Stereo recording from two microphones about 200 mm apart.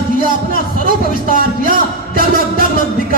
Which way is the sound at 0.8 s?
45° right (ahead or behind).